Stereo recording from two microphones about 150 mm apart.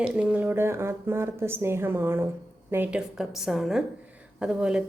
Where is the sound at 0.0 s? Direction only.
10° right (ahead or behind).